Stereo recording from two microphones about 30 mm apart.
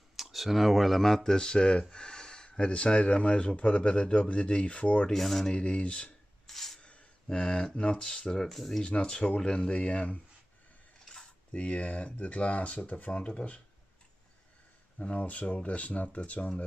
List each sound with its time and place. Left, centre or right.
0.1 s speech: centre
1.2 s speech: left
5.1 s speech: centre
5.5 s speech: left
6.4 s a sound: centre
6.8 s a sound: left
7.2 s speech: left
7.7 s speech: left
8.5 s speech: centre
8.8 s speech: left
11.5 s speech: left
15.0 s speech: left